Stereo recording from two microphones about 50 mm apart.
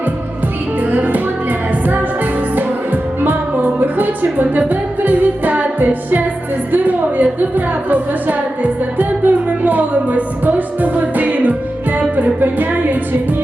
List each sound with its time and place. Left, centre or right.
0.8 s music: right
2.6 s music: right